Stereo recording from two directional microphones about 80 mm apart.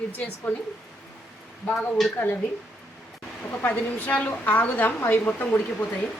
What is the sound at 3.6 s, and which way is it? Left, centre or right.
A woman's voice, centre.